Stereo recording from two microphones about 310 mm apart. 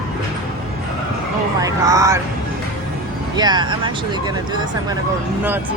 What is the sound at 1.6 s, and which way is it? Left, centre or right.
Speech, centre.